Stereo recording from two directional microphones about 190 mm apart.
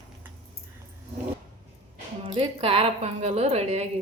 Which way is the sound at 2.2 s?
30° right (ahead or behind).